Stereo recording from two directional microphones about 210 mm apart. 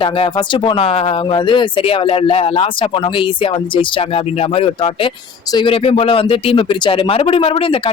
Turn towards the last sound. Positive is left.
turn(degrees=25)  # may be behind; listen again after turning